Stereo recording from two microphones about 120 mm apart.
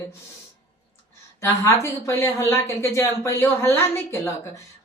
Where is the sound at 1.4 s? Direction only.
25° left (ahead or behind).